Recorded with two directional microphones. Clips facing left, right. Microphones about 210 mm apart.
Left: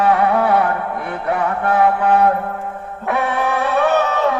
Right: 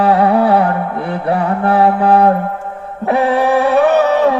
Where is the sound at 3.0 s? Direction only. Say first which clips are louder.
Right 7 dB; 30° right (ahead or behind).